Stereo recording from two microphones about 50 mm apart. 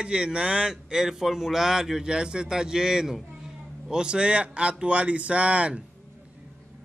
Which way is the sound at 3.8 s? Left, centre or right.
Centre.